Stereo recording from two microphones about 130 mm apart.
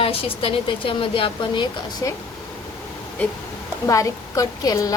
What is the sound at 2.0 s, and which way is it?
Speech, 25° left (ahead or behind).